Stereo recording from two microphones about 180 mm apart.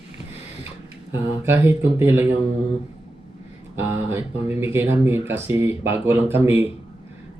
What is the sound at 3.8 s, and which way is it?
Speech, 15° right (ahead or behind).